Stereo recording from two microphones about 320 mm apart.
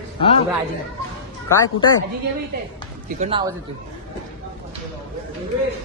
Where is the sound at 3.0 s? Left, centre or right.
Right.